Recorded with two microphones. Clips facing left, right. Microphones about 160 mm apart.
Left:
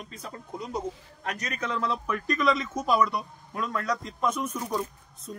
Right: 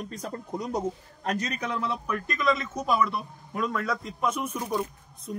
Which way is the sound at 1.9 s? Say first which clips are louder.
Left 2 dB; centre (ahead or behind).